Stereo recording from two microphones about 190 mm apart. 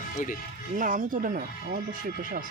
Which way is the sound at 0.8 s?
45° right (ahead or behind).